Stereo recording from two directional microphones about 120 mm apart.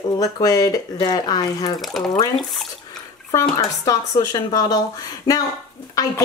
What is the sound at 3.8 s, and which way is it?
Speech, 30° left (ahead or behind).